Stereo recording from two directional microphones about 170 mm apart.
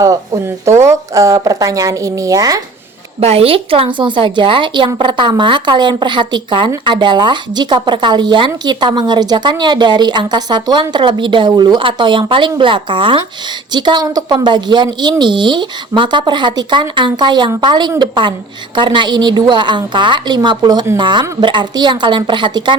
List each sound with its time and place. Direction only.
0.8 s a woman's voice: 15° right (ahead or behind)
3.2 s a woman's voice: 35° right (ahead or behind)